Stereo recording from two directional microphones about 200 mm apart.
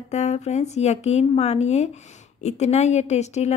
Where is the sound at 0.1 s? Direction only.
35° left (ahead or behind).